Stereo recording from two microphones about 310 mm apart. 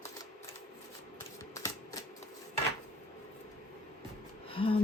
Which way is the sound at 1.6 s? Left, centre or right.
Centre.